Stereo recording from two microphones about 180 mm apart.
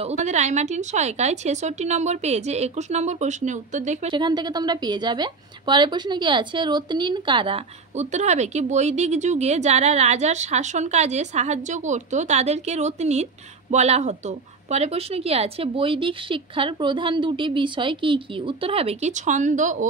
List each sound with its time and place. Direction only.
0.0 s a woman's voice: 40° right (ahead or behind)
4.1 s a woman's voice: 25° right (ahead or behind); by 19.9 s 45° right (ahead or behind)